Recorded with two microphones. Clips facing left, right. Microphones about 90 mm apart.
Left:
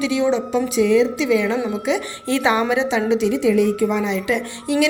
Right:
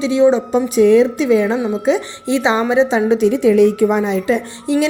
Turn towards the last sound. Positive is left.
turn(degrees=-30)  # may be behind; listen again after turning